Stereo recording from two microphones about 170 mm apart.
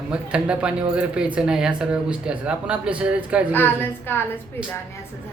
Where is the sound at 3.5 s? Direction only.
10° left (ahead or behind).